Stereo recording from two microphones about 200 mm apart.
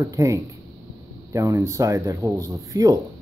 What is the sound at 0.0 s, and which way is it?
Speech, 15° right (ahead or behind).